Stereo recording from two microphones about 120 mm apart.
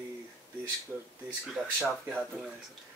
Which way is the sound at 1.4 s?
10° right (ahead or behind).